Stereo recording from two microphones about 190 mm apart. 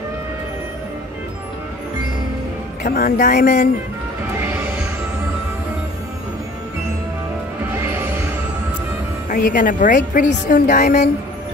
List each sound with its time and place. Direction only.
2.8 s a woman's voice: 50° left (ahead or behind)
4.4 s music: 10° right (ahead or behind)
7.8 s music: 10° right (ahead or behind)
9.3 s a woman's voice: 45° left (ahead or behind)